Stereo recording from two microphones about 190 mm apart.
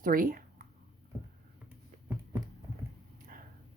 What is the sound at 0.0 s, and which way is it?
Speech, 45° right (ahead or behind).